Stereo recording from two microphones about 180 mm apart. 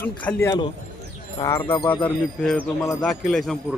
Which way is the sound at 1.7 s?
25° left (ahead or behind).